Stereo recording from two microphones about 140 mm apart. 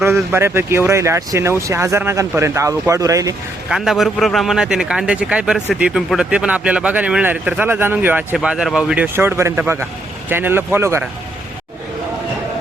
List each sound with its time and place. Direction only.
0.0 s speech: 15° right (ahead or behind)
3.7 s a man's voice: 5° right (ahead or behind); by 11.1 s 20° right (ahead or behind)